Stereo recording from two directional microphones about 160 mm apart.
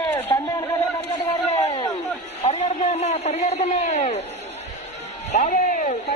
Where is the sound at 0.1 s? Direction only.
15° left (ahead or behind).